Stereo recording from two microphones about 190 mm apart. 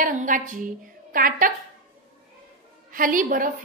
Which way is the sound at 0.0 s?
45° right (ahead or behind).